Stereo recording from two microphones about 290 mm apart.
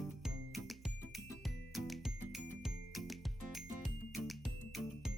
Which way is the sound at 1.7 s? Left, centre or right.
Centre.